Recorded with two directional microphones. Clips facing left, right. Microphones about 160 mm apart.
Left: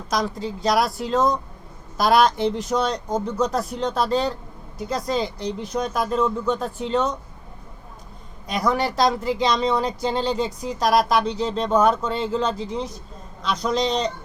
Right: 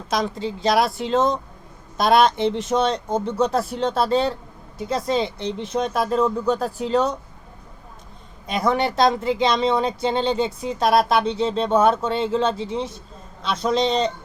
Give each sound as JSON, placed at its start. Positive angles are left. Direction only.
{"t": 0.4, "sound": "speech", "side_deg": -25}
{"t": 8.5, "sound": "speech", "side_deg": -25}